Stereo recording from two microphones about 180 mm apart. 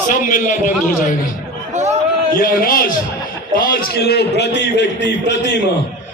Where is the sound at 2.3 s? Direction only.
55° left (ahead or behind).